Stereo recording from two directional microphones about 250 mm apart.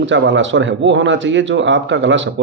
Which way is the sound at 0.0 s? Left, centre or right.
Right.